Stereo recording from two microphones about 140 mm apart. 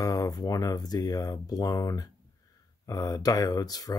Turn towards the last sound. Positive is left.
turn(degrees=25)  # may be behind; listen again after turning